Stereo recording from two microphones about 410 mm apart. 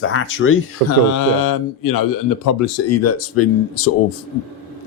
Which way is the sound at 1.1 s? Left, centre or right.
Left.